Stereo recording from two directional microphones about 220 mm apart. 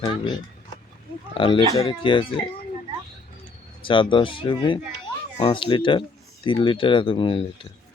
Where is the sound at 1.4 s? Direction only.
25° left (ahead or behind).